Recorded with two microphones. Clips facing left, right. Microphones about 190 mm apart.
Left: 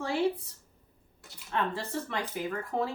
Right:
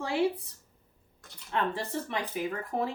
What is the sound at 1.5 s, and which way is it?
Speech, 15° right (ahead or behind).